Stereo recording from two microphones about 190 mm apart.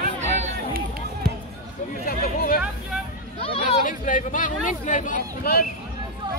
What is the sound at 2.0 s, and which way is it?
Hubbub, 50° left (ahead or behind).